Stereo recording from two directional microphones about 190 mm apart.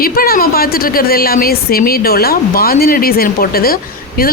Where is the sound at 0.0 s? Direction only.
50° left (ahead or behind).